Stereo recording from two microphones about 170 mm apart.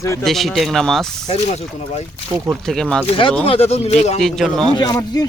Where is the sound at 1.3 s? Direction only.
40° left (ahead or behind).